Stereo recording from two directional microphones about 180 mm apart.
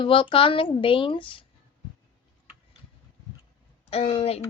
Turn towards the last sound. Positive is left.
turn(degrees=35)  # may be behind; listen again after turning